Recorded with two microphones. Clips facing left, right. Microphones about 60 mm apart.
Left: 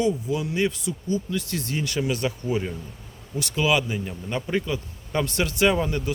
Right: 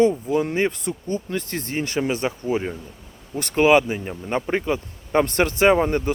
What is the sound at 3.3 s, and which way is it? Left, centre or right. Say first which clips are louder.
Speech: right 7 dB; right.